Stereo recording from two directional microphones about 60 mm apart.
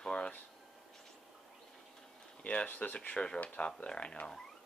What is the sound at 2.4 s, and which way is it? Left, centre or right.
Speech, left.